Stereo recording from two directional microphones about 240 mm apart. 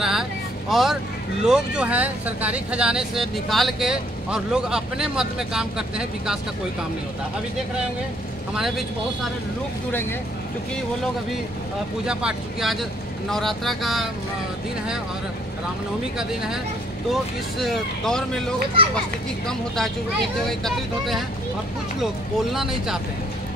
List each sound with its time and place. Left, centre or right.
0.0 s vehicle: centre
1.4 s speech: centre
8.5 s speech: centre
12.1 s speech: centre
17.1 s speech: centre
22.5 s speech: centre